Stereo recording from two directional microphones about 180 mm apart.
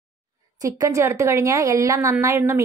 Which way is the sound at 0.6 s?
15° right (ahead or behind).